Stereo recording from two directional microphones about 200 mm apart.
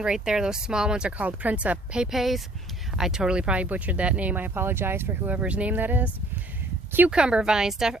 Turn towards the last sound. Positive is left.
turn(degrees=-5)  # may be behind; listen again after turning